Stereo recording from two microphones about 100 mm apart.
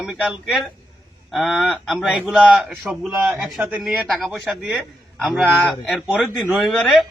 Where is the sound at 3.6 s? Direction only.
20° right (ahead or behind).